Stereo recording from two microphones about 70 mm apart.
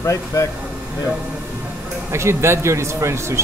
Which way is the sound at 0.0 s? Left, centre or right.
Left.